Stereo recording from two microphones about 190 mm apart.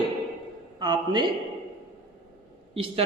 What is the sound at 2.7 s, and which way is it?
Speech, 30° right (ahead or behind).